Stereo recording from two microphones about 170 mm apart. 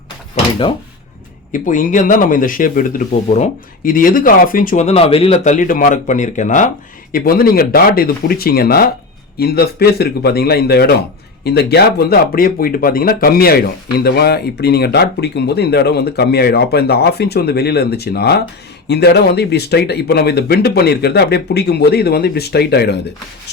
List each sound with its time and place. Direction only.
1.5 s speech: 50° left (ahead or behind)
7.1 s speech: 60° left (ahead or behind)